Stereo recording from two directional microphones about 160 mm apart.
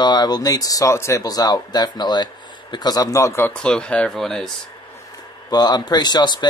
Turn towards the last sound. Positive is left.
turn(degrees=25)  # may be behind; listen again after turning